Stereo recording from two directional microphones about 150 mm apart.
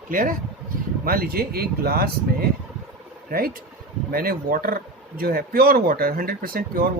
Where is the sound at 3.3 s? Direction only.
75° right (ahead or behind).